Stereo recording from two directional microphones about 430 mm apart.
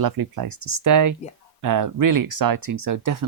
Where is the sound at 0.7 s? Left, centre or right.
Right.